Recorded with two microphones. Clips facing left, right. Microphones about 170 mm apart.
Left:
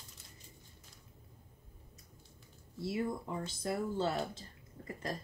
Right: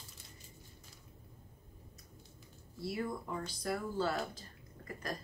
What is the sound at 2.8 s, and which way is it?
Speech, 25° left (ahead or behind).